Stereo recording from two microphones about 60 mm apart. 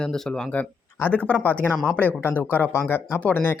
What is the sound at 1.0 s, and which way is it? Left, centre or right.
Speech, left.